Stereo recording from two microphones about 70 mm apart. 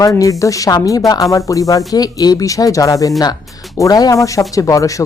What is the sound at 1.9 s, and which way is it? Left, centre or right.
A woman's voice, left.